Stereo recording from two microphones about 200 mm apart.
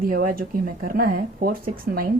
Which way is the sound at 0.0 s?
45° right (ahead or behind).